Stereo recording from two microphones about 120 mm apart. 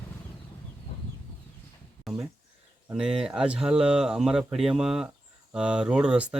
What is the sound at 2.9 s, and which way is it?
Speech, 5° right (ahead or behind).